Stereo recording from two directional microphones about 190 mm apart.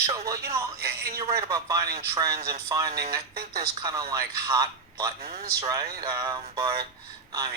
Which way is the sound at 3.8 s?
20° right (ahead or behind).